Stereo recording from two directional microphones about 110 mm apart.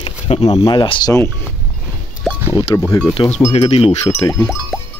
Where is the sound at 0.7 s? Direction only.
40° left (ahead or behind).